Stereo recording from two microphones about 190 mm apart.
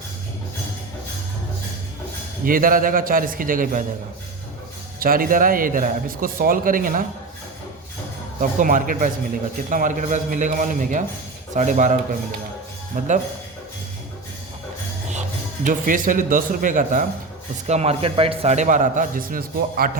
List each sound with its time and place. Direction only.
2.4 s a man's voice: 45° right (ahead or behind)
4.9 s a man's voice: 50° right (ahead or behind)
8.4 s a man's voice: 45° right (ahead or behind)
12.9 s a man's voice: 45° right (ahead or behind)
15.6 s a man's voice: 45° right (ahead or behind)